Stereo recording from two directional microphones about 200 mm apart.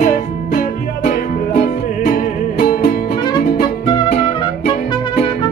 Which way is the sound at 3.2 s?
20° left (ahead or behind).